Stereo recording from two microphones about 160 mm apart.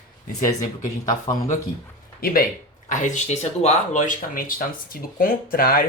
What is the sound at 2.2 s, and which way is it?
Speech, 65° left (ahead or behind).